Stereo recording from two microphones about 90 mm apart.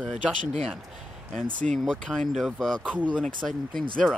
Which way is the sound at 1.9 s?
5° left (ahead or behind).